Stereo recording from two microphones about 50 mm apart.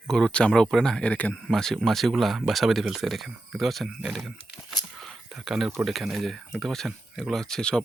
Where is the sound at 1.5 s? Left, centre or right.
Centre.